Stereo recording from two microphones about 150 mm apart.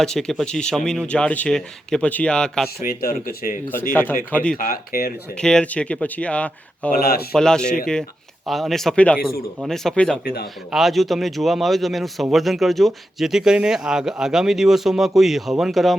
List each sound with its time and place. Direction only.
0.0 s speech: 5° left (ahead or behind)
2.8 s speech: 75° left (ahead or behind)
4.3 s speech: 10° left (ahead or behind)
4.5 s speech: 75° left (ahead or behind)
5.3 s speech: 5° left (ahead or behind)
7.0 s speech: 90° left
7.3 s speech: 5° left (ahead or behind)
10.2 s speech: 90° left
10.7 s speech: centre (ahead or behind)